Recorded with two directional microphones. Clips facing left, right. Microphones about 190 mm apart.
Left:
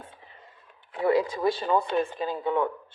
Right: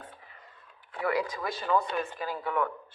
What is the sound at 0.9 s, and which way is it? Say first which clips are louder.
Speech: left 6 dB; 25° left (ahead or behind).